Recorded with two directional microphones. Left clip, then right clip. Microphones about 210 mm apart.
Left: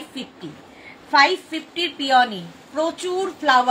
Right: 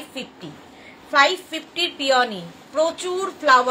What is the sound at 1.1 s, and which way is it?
A woman's voice, 15° right (ahead or behind).